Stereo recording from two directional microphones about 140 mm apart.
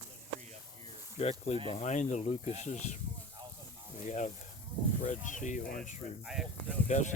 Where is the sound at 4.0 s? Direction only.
60° left (ahead or behind).